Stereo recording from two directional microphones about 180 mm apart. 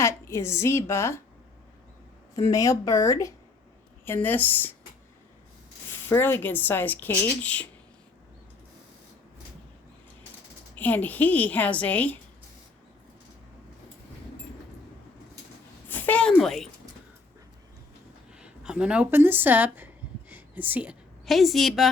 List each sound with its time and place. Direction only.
0.0 s speech: 15° left (ahead or behind)
2.3 s speech: 20° left (ahead or behind)
6.1 s speech: 15° left (ahead or behind)
10.8 s speech: 10° left (ahead or behind)
15.9 s a sound: 10° left (ahead or behind)
18.3 s a woman's voice: 5° right (ahead or behind)